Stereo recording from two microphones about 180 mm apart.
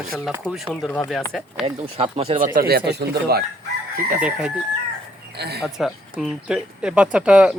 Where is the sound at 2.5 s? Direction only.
55° right (ahead or behind).